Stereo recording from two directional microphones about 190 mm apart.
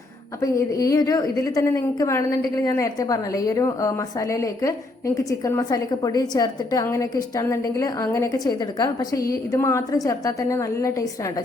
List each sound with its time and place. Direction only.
0.4 s a woman's voice: 15° left (ahead or behind)